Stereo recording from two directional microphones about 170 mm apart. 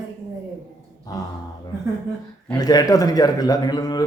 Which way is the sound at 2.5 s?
20° left (ahead or behind).